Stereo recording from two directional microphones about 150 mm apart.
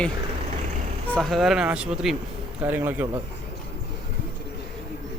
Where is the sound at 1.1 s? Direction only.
Centre (ahead or behind).